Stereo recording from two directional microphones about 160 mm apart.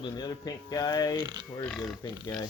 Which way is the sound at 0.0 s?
25° left (ahead or behind).